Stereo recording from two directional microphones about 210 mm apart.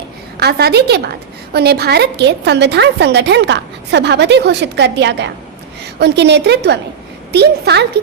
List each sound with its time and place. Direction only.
0.3 s a woman's voice: 50° right (ahead or behind)